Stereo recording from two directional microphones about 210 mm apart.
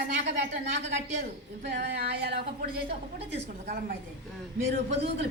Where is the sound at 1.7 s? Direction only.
50° right (ahead or behind).